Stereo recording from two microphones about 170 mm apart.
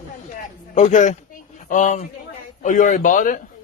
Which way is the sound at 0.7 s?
45° left (ahead or behind).